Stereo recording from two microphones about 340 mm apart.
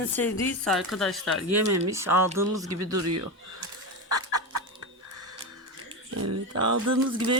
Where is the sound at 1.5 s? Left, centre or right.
Right.